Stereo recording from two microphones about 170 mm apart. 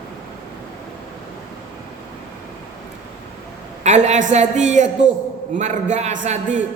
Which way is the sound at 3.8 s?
45° right (ahead or behind).